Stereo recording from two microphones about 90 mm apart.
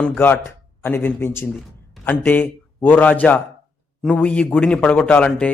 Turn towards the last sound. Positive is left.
turn(degrees=15)  # may be behind; listen again after turning